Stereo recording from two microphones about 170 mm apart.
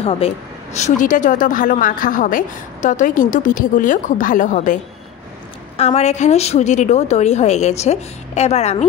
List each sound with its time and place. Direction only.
0.0 s speech: 35° left (ahead or behind)
0.7 s a woman's voice: 45° left (ahead or behind)
5.8 s a woman's voice: 40° left (ahead or behind)